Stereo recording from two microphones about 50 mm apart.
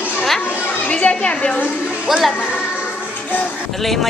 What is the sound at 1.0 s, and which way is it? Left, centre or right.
Speech, left.